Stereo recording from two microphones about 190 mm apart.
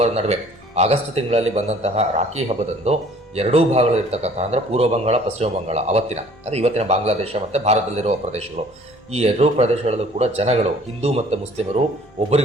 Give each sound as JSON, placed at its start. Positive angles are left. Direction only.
{"t": 0.0, "sound": "speech", "side_deg": -35}